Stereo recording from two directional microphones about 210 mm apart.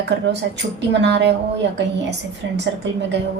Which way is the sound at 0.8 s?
55° right (ahead or behind).